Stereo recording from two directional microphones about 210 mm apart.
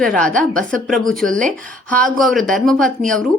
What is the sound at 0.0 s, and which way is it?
Speech, 5° left (ahead or behind).